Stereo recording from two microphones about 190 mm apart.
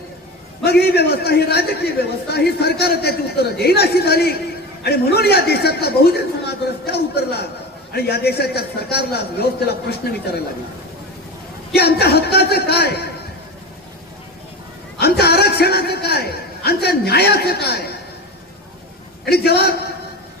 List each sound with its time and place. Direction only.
0.6 s a man's voice: 55° left (ahead or behind)
11.7 s a man's voice: 55° left (ahead or behind)
14.9 s a sound: 55° left (ahead or behind)
19.2 s a man's voice: 55° left (ahead or behind)